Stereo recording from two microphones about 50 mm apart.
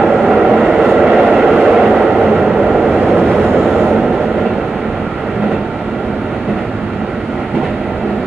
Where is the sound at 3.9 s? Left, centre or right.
Centre.